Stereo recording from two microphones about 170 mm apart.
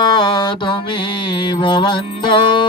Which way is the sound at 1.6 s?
30° left (ahead or behind).